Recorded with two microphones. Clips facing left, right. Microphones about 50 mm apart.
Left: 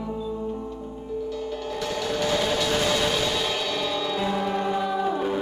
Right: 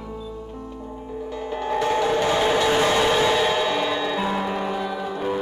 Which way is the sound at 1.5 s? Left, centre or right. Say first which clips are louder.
Right 7 dB; right.